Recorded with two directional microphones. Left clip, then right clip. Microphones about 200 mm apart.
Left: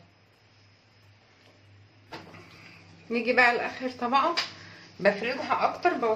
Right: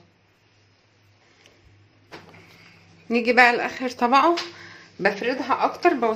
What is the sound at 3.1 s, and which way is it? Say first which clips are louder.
Speech: right 6 dB; 60° right (ahead or behind).